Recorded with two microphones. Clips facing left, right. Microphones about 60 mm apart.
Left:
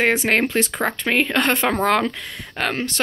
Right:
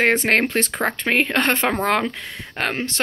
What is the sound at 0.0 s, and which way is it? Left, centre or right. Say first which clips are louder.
Speech: right 1 dB; right.